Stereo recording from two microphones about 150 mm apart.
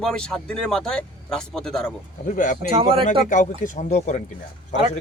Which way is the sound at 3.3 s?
55° left (ahead or behind).